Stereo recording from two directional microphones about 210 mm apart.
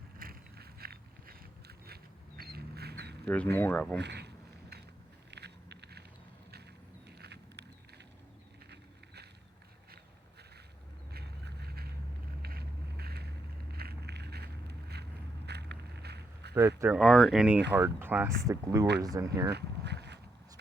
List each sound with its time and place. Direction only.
0.2 s biting: 45° right (ahead or behind)
3.2 s speech: 10° left (ahead or behind)
3.9 s speech: 55° right (ahead or behind)
5.3 s biting: 55° right (ahead or behind)
7.2 s a sound: 55° right (ahead or behind)
11.1 s a sound: 50° right (ahead or behind)
12.4 s vehicle: 50° right (ahead or behind)
16.6 s speech: 10° right (ahead or behind)
17.0 s speech: centre (ahead or behind)
19.5 s boat: 55° right (ahead or behind)